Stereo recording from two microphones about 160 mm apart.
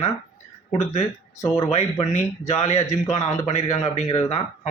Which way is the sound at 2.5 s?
40° left (ahead or behind).